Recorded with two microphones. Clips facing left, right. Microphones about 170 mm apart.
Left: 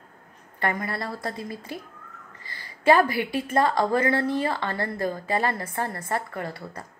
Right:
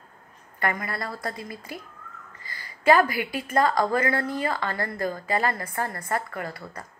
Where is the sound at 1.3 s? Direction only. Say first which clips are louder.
Left 3 dB; centre (ahead or behind).